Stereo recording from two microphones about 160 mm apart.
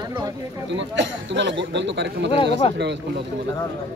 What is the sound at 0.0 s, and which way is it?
Speech, 25° right (ahead or behind).